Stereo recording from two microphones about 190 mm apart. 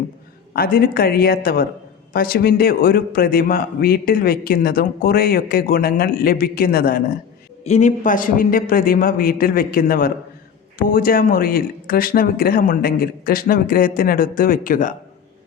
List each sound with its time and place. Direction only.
0.5 s a man's voice: 50° left (ahead or behind)
7.6 s a man's voice: 35° left (ahead or behind)